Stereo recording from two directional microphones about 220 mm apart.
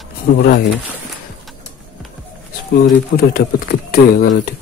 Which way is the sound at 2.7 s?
40° left (ahead or behind).